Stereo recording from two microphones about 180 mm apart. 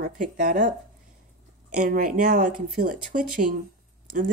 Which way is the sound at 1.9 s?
50° right (ahead or behind).